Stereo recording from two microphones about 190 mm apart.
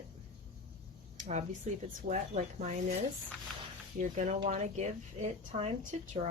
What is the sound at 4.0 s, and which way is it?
A woman's voice, 40° right (ahead or behind).